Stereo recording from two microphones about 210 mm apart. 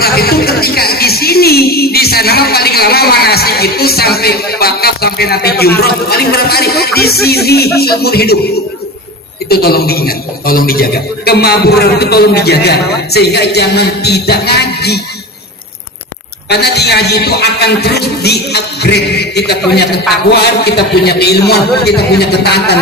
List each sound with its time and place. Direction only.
0.0 s speech: 50° left (ahead or behind)
9.5 s a man's voice: 50° left (ahead or behind)
16.5 s a man's voice: 50° left (ahead or behind)